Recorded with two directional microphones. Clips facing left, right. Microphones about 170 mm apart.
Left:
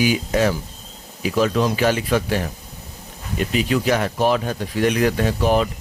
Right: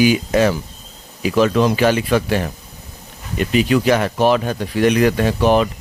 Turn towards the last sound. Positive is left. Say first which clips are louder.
# right 3 dB
turn(degrees=-75)  # may be behind; listen again after turning